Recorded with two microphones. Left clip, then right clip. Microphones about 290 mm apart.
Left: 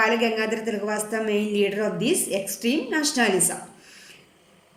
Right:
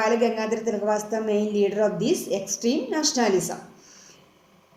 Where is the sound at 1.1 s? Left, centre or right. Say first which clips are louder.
Even; right.